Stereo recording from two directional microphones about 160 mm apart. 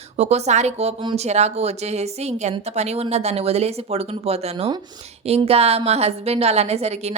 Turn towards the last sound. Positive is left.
turn(degrees=-40)  # may be behind; listen again after turning